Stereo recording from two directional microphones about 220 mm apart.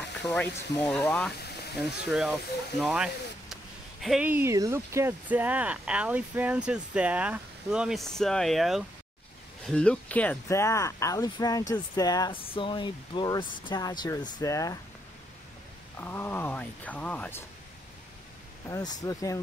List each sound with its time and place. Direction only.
0.3 s speech: 5° left (ahead or behind)
16.0 s speech: 10° left (ahead or behind)
18.7 s speech: 15° left (ahead or behind)